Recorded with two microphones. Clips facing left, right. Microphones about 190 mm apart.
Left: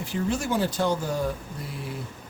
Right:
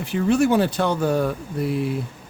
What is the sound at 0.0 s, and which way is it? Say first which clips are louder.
A man's voice: right 9 dB; 65° right (ahead or behind).